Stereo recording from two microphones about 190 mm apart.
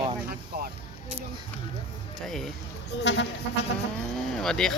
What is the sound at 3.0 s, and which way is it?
Music, 70° left (ahead or behind).